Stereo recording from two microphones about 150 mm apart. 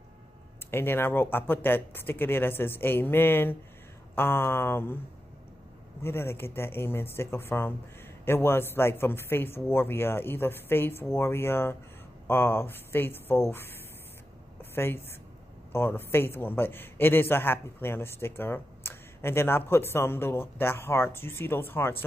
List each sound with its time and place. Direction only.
0.7 s a man's voice: 15° left (ahead or behind)
6.0 s a man's voice: 15° left (ahead or behind)